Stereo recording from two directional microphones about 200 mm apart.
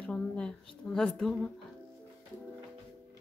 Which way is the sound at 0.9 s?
5° left (ahead or behind).